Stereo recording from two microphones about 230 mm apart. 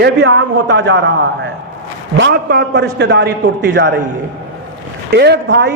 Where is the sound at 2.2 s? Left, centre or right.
Right.